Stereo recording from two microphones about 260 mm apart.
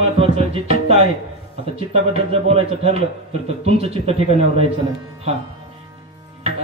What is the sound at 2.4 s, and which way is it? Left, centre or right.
A man's voice, right.